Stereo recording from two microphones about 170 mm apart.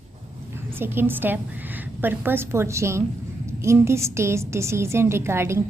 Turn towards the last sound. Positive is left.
turn(degrees=-15)  # may be behind; listen again after turning